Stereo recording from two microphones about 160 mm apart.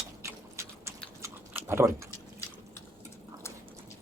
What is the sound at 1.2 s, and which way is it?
Chewing, 15° right (ahead or behind).